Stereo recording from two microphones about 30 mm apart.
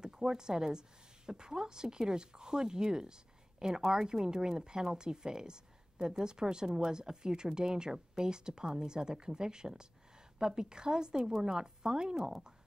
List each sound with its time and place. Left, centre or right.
0.0 s a woman's voice: right